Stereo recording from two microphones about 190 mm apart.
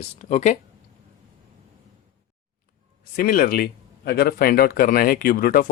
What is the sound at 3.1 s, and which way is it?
Speech, 50° left (ahead or behind).